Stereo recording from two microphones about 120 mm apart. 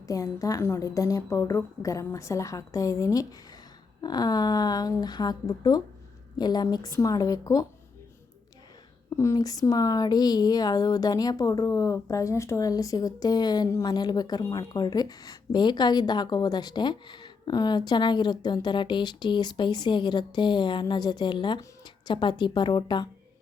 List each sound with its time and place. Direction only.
0.1 s a woman's voice: 30° left (ahead or behind)
9.1 s speech: 25° left (ahead or behind)